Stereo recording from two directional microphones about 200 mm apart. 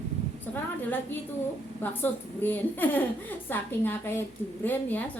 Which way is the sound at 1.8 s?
10° left (ahead or behind).